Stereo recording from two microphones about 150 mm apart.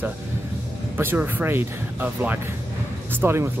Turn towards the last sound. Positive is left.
turn(degrees=-15)  # may be behind; listen again after turning